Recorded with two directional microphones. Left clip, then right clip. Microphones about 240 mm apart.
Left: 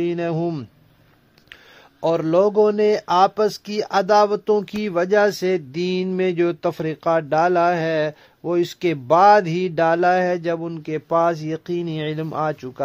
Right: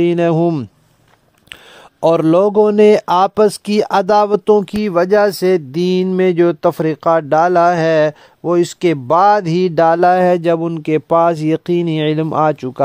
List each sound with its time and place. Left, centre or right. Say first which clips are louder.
0.0 s speech: right 9 dB; right